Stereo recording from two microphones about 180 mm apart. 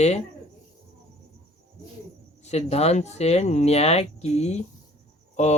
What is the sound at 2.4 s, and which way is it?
Speech, 40° left (ahead or behind).